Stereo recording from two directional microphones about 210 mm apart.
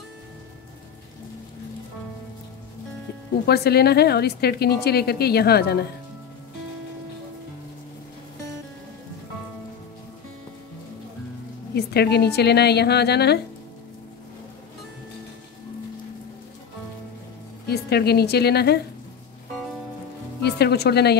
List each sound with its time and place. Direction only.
3.4 s a woman's voice: 50° left (ahead or behind)
11.7 s a woman's voice: 50° left (ahead or behind)
17.6 s a woman's voice: 50° left (ahead or behind)
20.4 s speech: 50° left (ahead or behind)